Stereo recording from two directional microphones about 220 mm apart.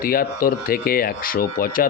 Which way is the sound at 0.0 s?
40° left (ahead or behind).